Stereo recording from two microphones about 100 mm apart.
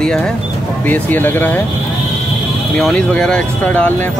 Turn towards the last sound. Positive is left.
turn(degrees=15)  # may be behind; listen again after turning